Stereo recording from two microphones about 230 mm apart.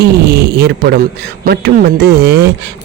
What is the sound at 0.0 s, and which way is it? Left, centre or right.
A man's voice, right.